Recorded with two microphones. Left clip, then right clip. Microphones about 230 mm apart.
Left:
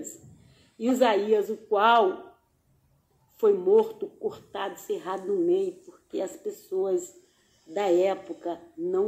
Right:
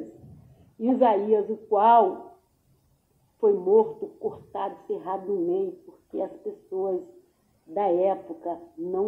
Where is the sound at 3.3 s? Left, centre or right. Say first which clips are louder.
Right 1 dB; left.